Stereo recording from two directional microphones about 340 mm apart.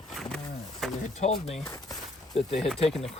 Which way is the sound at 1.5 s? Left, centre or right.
Centre.